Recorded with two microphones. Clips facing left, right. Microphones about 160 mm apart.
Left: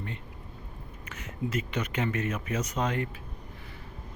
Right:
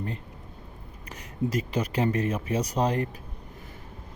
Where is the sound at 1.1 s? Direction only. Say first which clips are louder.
Right 4 dB; 35° right (ahead or behind).